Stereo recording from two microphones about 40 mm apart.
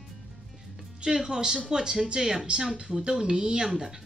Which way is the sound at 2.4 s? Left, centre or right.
Right.